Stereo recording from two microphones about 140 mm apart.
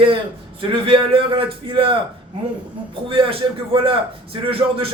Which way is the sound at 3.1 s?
40° right (ahead or behind).